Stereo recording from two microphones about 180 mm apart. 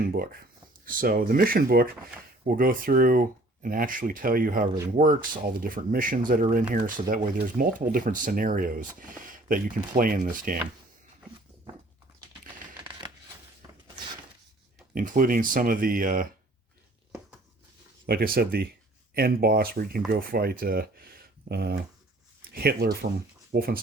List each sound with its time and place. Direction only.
0.9 s speech: 50° right (ahead or behind)
12.8 s a sound: 25° right (ahead or behind)
14.9 s speech: 50° right (ahead or behind)
18.0 s speech: 60° right (ahead or behind)